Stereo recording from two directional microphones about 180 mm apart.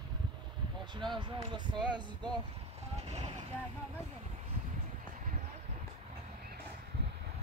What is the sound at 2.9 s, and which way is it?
Vehicle, 35° right (ahead or behind).